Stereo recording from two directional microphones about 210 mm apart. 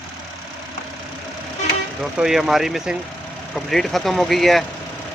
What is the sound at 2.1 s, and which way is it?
Speech, centre (ahead or behind).